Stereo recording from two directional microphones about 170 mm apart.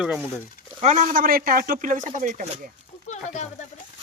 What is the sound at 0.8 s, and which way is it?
Speech, 50° right (ahead or behind).